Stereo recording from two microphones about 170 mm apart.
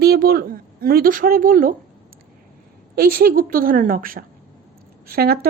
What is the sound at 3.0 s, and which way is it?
A woman's voice, 60° right (ahead or behind).